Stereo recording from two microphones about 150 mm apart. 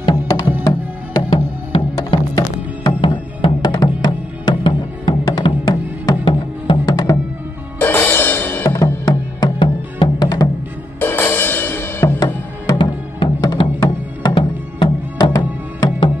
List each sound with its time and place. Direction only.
0.0 s music: 25° left (ahead or behind)
7.8 s music: 15° left (ahead or behind)
11.0 s music: 15° left (ahead or behind)
12.7 s music: 30° left (ahead or behind)